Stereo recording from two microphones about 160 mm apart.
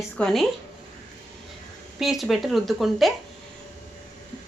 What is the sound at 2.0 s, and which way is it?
Speech, centre (ahead or behind).